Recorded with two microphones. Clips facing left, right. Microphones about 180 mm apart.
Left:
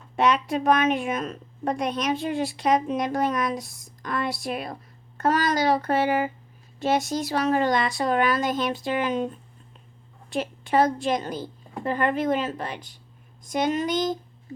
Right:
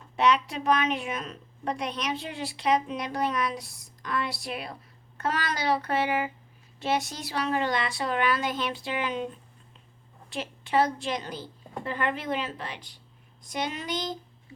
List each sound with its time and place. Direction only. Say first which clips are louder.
0.2 s a woman's voice: left 2 dB; 50° left (ahead or behind)